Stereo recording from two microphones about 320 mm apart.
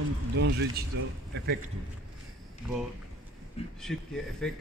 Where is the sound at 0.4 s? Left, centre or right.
Right.